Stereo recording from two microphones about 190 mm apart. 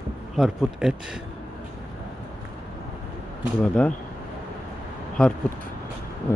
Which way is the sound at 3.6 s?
5° left (ahead or behind).